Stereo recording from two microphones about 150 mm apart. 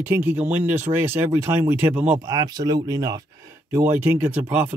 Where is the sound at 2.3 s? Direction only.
25° right (ahead or behind).